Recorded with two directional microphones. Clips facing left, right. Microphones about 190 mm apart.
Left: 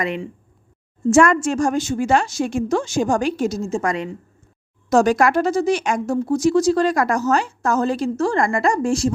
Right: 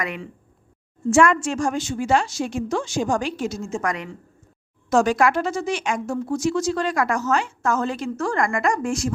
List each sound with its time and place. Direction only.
0.0 s speech: 25° left (ahead or behind)
1.1 s a woman's voice: 45° left (ahead or behind)
4.9 s speech: 40° left (ahead or behind)